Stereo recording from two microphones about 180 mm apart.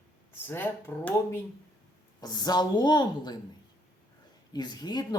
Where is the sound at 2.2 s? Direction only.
20° left (ahead or behind).